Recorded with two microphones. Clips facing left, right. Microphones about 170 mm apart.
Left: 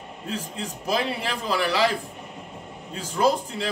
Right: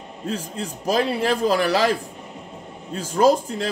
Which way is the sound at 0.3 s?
40° right (ahead or behind).